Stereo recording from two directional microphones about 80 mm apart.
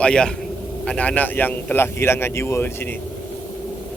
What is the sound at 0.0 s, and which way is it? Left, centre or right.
A man's voice, centre.